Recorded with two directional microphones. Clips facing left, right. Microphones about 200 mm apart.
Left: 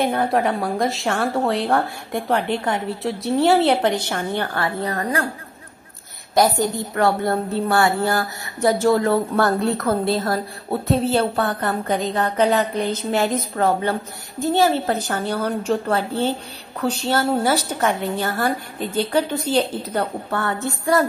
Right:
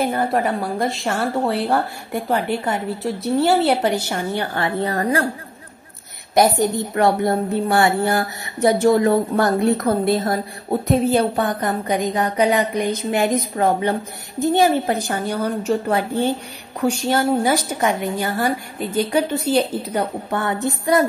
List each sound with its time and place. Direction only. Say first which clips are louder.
0.0 s a woman's voice: even; 5° right (ahead or behind); by 5.2 s 25° right (ahead or behind)
6.3 s a woman's voice: right 2 dB; 20° right (ahead or behind)